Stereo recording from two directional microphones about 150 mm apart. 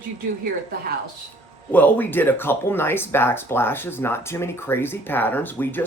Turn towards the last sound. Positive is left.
turn(degrees=10)  # may be behind; listen again after turning